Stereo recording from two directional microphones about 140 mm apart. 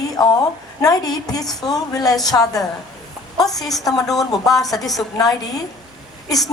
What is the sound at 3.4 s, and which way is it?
A woman's voice, centre (ahead or behind).